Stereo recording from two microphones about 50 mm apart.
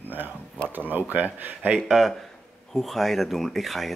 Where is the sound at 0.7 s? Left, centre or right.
Right.